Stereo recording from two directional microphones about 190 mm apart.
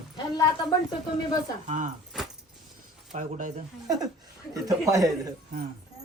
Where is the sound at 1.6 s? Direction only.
40° right (ahead or behind).